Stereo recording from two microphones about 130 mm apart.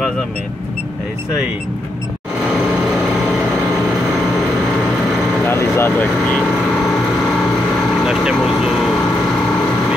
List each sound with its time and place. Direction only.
5.5 s speech: 20° left (ahead or behind)
8.0 s speech: 5° right (ahead or behind)